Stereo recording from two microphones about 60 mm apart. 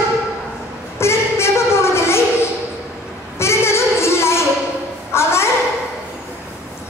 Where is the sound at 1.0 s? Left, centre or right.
Left.